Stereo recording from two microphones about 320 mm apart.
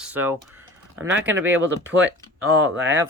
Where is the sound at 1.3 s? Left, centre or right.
Right.